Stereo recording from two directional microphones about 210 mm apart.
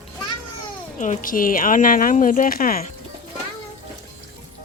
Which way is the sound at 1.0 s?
40° left (ahead or behind).